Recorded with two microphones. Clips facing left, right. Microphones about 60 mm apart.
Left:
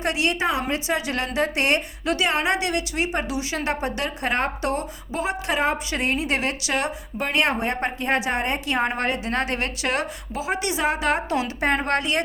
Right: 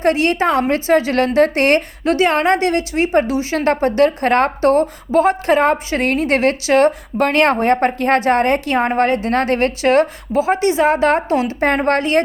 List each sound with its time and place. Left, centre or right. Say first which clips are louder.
0.0 s a woman's voice: right 8 dB; right
11.9 s a woman's voice: right 8 dB; right